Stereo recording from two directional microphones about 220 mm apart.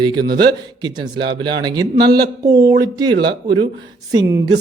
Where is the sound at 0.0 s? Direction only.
20° right (ahead or behind).